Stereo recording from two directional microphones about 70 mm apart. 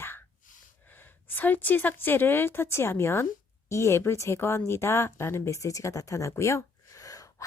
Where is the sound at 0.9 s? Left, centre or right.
Left.